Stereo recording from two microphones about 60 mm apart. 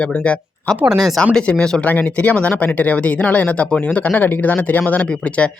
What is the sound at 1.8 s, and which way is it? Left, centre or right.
Speech, left.